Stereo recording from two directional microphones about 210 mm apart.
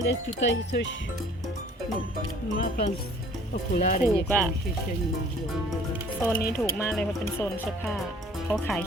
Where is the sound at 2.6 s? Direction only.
40° left (ahead or behind).